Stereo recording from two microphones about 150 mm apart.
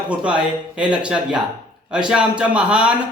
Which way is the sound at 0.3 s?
5° right (ahead or behind).